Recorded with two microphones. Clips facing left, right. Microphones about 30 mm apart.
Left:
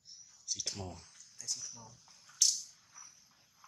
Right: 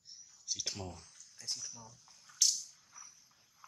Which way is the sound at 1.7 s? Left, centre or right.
Centre.